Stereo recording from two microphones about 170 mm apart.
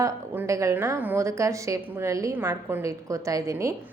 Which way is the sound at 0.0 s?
20° right (ahead or behind).